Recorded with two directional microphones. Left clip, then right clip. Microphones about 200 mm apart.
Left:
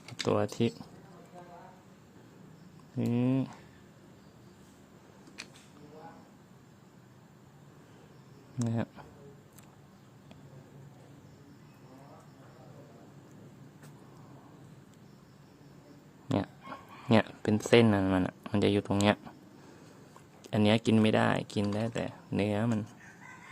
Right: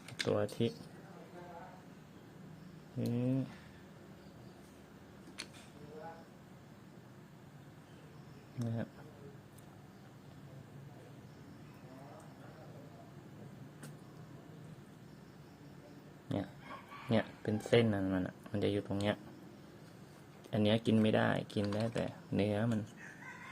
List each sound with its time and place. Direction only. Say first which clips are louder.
0.3 s speech: left 5 dB; 15° left (ahead or behind)
3.1 s speech: left 6 dB; 20° left (ahead or behind)
8.5 s speech: left 7 dB; 20° left (ahead or behind)
16.3 s pig: left 8 dB; 20° left (ahead or behind)
17.1 s speech: left 8 dB; 20° left (ahead or behind)
20.4 s speech: left 5 dB; 15° left (ahead or behind)